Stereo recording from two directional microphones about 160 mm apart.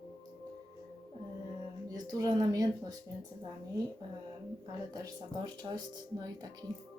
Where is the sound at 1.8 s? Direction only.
25° right (ahead or behind).